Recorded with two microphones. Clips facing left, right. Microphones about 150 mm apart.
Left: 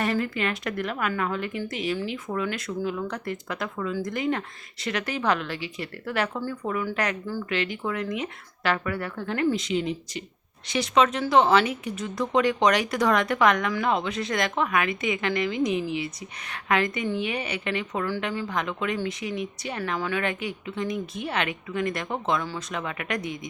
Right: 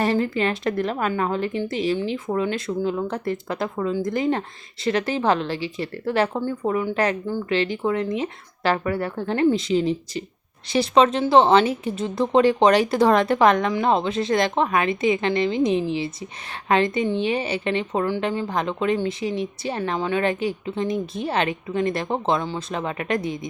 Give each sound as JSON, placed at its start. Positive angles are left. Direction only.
{"t": 0.0, "sound": "a woman's voice", "side_deg": -30}